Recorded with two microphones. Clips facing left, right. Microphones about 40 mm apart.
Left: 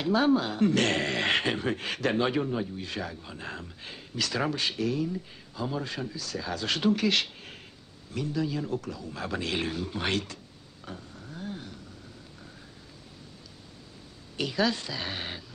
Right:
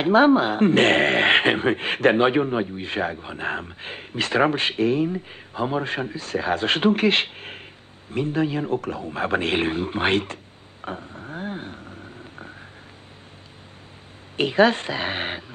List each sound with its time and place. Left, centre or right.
0.0 s a man's voice: right
14.3 s a man's voice: right